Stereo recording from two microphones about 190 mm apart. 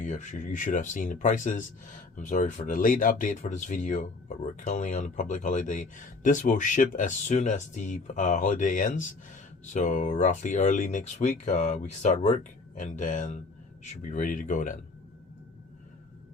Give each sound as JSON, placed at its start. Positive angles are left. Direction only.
{"t": 0.0, "sound": "speech", "side_deg": 40}